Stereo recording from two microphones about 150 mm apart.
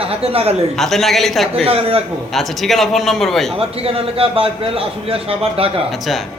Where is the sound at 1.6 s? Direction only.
40° right (ahead or behind).